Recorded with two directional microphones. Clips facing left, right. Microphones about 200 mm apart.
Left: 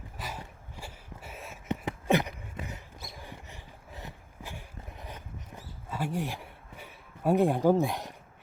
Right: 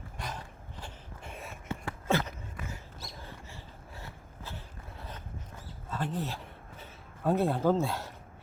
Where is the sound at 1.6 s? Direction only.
20° left (ahead or behind).